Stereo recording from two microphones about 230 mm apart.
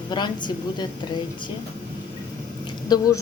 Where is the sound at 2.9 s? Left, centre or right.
Centre.